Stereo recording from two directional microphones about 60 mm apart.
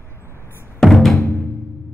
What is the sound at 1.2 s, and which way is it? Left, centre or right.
Music, left.